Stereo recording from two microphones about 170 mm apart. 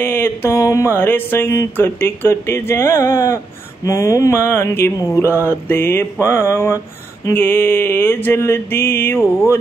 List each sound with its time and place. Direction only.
0.0 s mantra: 15° left (ahead or behind)